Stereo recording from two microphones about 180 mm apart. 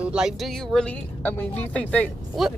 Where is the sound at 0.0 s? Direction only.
5° right (ahead or behind).